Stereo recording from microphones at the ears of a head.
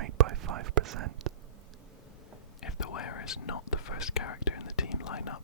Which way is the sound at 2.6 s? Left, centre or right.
Left.